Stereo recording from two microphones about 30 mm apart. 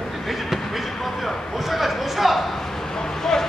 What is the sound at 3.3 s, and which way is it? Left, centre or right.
Speech, centre.